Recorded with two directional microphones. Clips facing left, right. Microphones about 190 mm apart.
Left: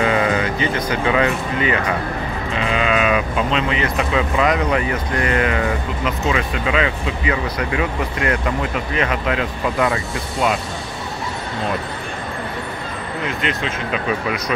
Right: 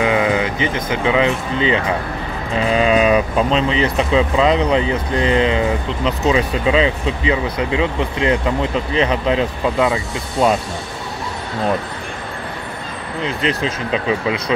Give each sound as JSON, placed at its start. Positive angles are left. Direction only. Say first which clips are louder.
{"t": 0.0, "sound": "speech", "louder": "right 1 dB", "side_deg": -15}
{"t": 2.6, "sound": "speech", "louder": "right 5 dB", "side_deg": -35}
{"t": 9.8, "sound": "speech", "louder": "right 2 dB", "side_deg": -20}
{"t": 10.4, "sound": "speech", "louder": "right 4 dB", "side_deg": -35}
{"t": 13.2, "sound": "speech", "louder": "right 4 dB", "side_deg": -30}